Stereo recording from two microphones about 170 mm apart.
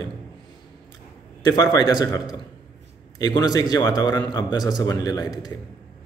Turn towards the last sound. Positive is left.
turn(degrees=25)  # may be behind; listen again after turning